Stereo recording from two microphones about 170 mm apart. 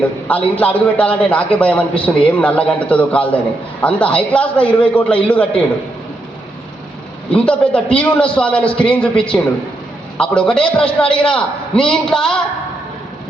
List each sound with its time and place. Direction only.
0.3 s a man's voice: 10° left (ahead or behind)
7.3 s a man's voice: 5° left (ahead or behind)